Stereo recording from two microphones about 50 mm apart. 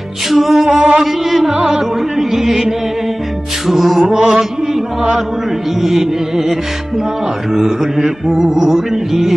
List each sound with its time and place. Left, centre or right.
0.3 s music: centre
0.7 s music: centre
1.0 s music: centre
4.0 s music: centre
5.8 s music: centre
7.5 s music: centre